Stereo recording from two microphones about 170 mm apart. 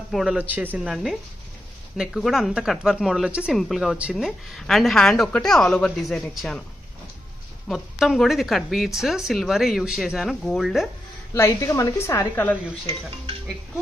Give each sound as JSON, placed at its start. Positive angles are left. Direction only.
{"t": 0.1, "sound": "speech", "side_deg": 0}
{"t": 7.6, "sound": "speech", "side_deg": 0}
{"t": 11.3, "sound": "a woman's voice", "side_deg": 15}